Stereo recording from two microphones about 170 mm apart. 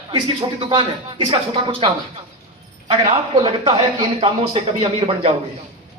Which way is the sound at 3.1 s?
30° right (ahead or behind).